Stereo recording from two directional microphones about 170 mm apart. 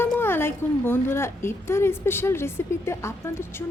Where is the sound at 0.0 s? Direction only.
15° left (ahead or behind).